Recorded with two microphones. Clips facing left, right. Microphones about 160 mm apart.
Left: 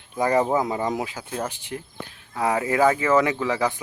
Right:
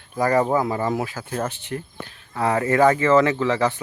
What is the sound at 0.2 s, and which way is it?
Speech, 15° left (ahead or behind).